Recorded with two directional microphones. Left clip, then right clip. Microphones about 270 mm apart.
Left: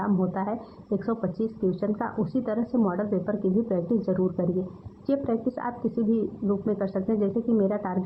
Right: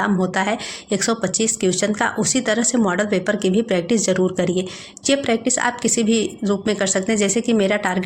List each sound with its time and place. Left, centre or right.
0.0 s speech: right